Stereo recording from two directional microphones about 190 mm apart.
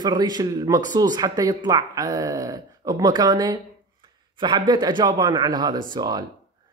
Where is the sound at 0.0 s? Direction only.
20° right (ahead or behind).